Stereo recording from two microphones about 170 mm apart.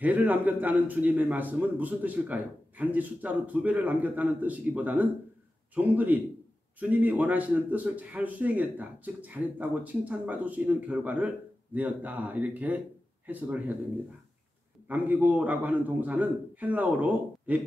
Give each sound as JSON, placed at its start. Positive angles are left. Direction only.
{"t": 0.0, "sound": "a man's voice", "side_deg": -10}
{"t": 6.8, "sound": "a man's voice", "side_deg": -10}
{"t": 14.9, "sound": "a man's voice", "side_deg": -10}